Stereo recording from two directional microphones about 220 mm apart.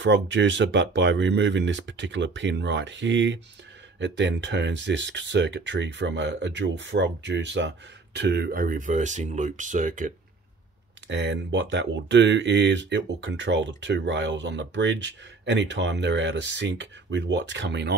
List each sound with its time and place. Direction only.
0.0 s speech: 55° right (ahead or behind); by 10.1 s 35° right (ahead or behind)
11.1 s speech: 55° right (ahead or behind)